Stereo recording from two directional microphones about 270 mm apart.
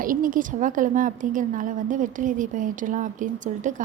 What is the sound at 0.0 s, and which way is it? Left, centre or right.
A woman's voice, right.